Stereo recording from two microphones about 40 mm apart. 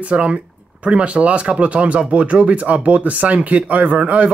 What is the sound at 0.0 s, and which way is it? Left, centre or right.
Speech, right.